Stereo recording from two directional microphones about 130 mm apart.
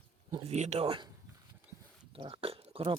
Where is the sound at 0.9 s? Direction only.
40° right (ahead or behind).